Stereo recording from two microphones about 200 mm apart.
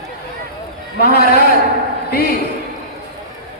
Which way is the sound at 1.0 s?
50° left (ahead or behind).